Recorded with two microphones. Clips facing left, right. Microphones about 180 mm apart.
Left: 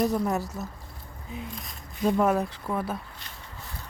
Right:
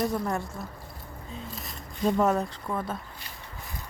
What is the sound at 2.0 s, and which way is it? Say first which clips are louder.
Speech: left 1 dB; 5° left (ahead or behind).